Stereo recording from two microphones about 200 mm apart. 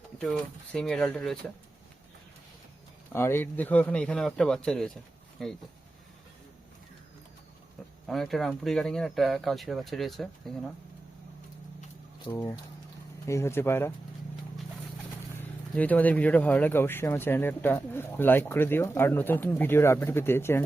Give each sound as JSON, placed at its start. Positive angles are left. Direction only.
{"t": 0.2, "sound": "speech", "side_deg": 5}
{"t": 3.1, "sound": "speech", "side_deg": 10}
{"t": 8.0, "sound": "speech", "side_deg": 0}
{"t": 12.3, "sound": "speech", "side_deg": 15}
{"t": 15.7, "sound": "speech", "side_deg": 5}